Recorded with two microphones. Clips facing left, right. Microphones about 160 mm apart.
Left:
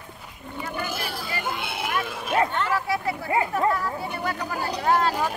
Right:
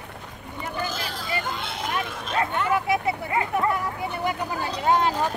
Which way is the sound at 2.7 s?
20° right (ahead or behind).